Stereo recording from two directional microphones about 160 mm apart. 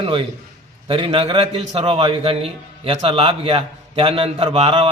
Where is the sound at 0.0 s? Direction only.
35° right (ahead or behind).